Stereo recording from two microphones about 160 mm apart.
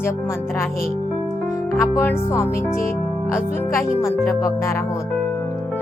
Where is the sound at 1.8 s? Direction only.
15° left (ahead or behind).